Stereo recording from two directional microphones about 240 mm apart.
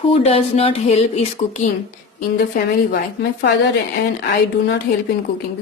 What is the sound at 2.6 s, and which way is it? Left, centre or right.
Speech, left.